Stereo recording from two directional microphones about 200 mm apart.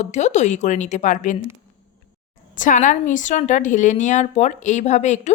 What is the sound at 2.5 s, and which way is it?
A woman's voice, 40° left (ahead or behind).